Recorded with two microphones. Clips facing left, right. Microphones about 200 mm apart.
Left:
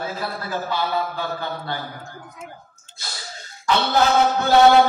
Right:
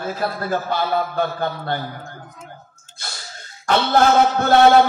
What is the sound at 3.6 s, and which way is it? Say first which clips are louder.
Speech: right 3 dB; 50° right (ahead or behind).